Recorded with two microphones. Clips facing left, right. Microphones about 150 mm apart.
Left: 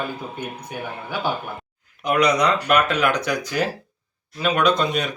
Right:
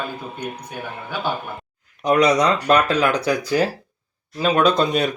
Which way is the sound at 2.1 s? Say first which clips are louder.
Right 2 dB; 30° right (ahead or behind).